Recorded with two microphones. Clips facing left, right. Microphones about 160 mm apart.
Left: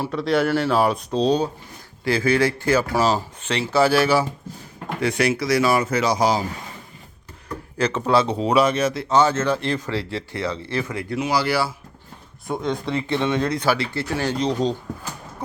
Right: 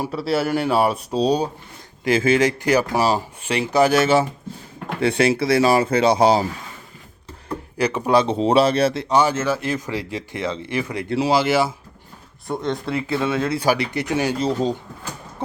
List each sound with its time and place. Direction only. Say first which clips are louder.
0.0 s speech: left 1 dB; 5° right (ahead or behind); by 6.4 s 30° right (ahead or behind)
7.8 s speech: right 1 dB; 15° right (ahead or behind); by 9.0 s 30° right (ahead or behind)
9.0 s speech: even; 10° right (ahead or behind)
12.5 s speech: even; centre (ahead or behind)